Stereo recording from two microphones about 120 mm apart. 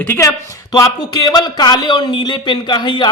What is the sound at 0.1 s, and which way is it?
A man's voice, 25° left (ahead or behind).